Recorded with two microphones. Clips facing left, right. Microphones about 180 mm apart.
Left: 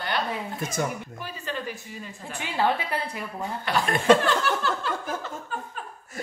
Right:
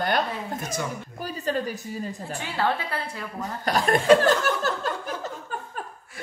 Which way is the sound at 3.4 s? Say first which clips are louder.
Right 2 dB; 40° right (ahead or behind).